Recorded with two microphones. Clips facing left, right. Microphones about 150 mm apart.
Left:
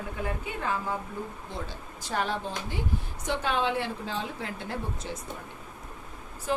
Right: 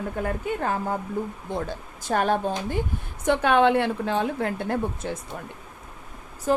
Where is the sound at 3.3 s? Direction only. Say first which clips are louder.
Right 9 dB; 60° right (ahead or behind).